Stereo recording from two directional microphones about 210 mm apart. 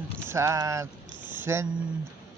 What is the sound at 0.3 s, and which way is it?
Speech, 15° right (ahead or behind).